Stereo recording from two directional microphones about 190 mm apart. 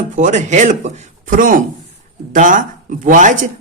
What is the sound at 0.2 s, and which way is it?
Speech, 40° right (ahead or behind).